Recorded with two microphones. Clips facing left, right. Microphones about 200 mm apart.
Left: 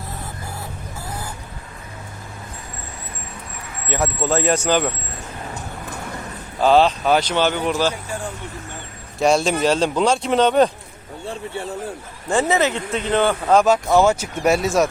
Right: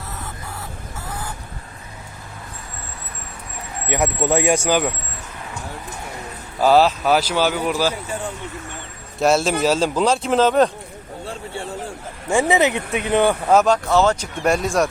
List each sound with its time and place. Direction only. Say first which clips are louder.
3.8 s speech: right 1 dB; 15° right (ahead or behind)
6.6 s speech: even; 5° right (ahead or behind)
9.1 s speech: even; centre (ahead or behind)
12.3 s speech: right 1 dB; 15° right (ahead or behind)
13.7 s speech: left 1 dB; 10° left (ahead or behind)